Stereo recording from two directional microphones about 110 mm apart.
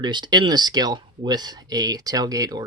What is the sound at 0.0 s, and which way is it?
Speech, 40° right (ahead or behind).